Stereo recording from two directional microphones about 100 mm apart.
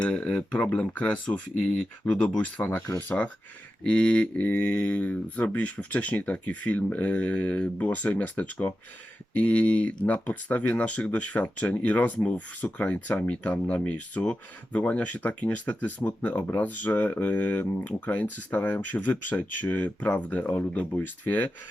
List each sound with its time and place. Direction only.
0.0 s speech: 10° left (ahead or behind)
2.6 s speech: 20° left (ahead or behind)